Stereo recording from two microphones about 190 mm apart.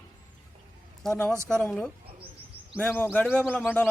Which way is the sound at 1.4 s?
Centre (ahead or behind).